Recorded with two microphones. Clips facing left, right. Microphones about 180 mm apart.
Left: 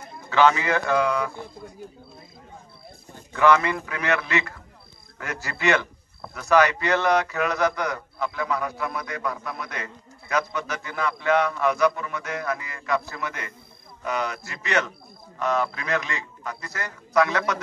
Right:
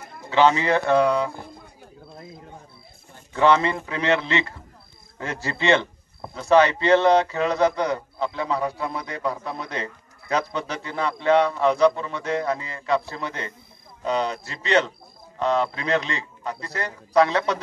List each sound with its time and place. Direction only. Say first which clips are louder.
0.3 s a man's voice: right 1 dB; 25° right (ahead or behind)
3.3 s a man's voice: right 1 dB; 25° right (ahead or behind)